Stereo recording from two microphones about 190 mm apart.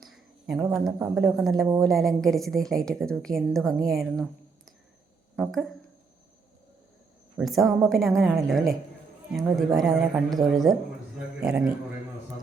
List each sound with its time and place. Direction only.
0.0 s a sound: centre (ahead or behind)
0.7 s a woman's voice: 5° right (ahead or behind)
5.4 s a woman's voice: centre (ahead or behind)
7.3 s a woman's voice: centre (ahead or behind)